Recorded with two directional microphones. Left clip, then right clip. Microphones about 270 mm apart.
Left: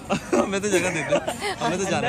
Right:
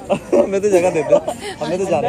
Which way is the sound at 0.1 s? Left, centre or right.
Centre.